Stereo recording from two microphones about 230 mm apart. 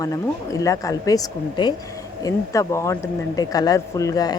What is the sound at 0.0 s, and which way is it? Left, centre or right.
Speech, centre.